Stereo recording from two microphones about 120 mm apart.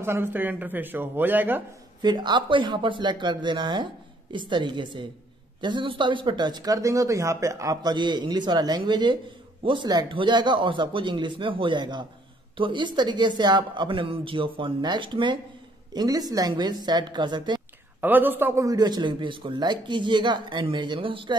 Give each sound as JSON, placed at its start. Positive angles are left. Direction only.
{"t": 0.0, "sound": "speech", "side_deg": -20}
{"t": 2.0, "sound": "speech", "side_deg": -35}
{"t": 18.0, "sound": "speech", "side_deg": -15}